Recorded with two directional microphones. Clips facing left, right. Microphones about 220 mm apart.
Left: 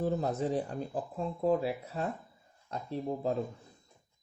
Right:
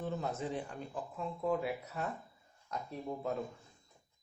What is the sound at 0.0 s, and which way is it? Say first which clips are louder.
Speech: left 7 dB; 35° left (ahead or behind).